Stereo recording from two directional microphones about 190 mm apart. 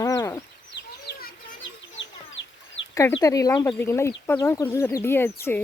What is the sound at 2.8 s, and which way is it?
Chicken, 85° left.